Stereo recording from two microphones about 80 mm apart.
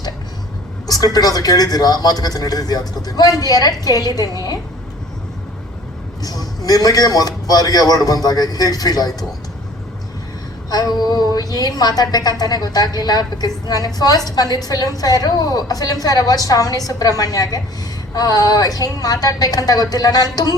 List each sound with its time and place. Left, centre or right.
0.9 s a man's voice: left
6.2 s a man's voice: left
10.7 s a woman's voice: left